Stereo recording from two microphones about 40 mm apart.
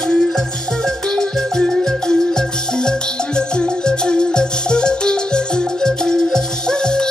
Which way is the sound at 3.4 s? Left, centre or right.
Left.